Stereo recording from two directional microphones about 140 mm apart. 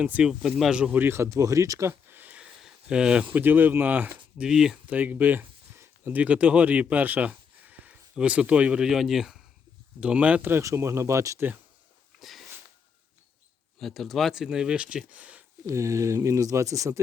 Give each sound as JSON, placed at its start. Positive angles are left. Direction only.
{"t": 0.0, "sound": "speech", "side_deg": -10}
{"t": 12.2, "sound": "sniff", "side_deg": 0}
{"t": 13.7, "sound": "speech", "side_deg": 0}
{"t": 15.6, "sound": "speech", "side_deg": -20}